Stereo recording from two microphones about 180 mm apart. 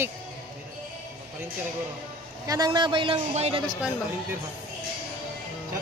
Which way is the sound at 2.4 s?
20° right (ahead or behind).